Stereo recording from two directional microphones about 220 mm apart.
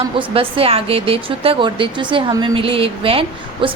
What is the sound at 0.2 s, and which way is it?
A woman's voice, 25° right (ahead or behind).